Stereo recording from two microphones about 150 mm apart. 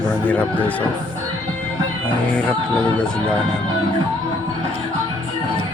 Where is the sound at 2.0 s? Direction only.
10° left (ahead or behind).